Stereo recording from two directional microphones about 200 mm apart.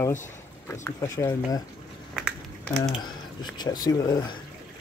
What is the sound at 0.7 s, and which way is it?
Speech, 15° left (ahead or behind).